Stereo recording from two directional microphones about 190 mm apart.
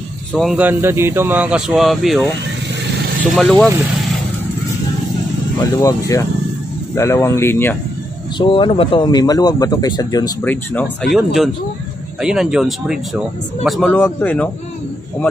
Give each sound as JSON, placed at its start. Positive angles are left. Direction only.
{"t": 0.3, "sound": "speech", "side_deg": 0}
{"t": 0.6, "sound": "speech", "side_deg": -10}
{"t": 3.3, "sound": "speech", "side_deg": 5}
{"t": 5.8, "sound": "speech", "side_deg": 15}
{"t": 8.4, "sound": "speech", "side_deg": 25}
{"t": 10.4, "sound": "speech", "side_deg": 10}